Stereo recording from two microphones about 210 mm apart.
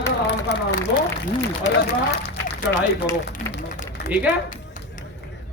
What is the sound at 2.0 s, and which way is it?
Speech, 55° left (ahead or behind).